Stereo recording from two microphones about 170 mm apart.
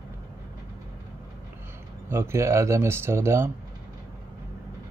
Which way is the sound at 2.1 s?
15° right (ahead or behind).